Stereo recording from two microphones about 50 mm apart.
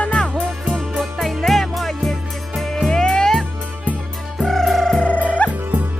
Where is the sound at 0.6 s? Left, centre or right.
Centre.